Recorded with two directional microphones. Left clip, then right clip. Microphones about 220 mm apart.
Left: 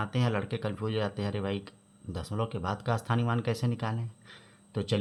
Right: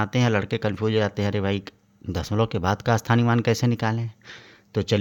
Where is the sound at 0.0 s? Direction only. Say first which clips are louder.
Right 8 dB; 40° right (ahead or behind).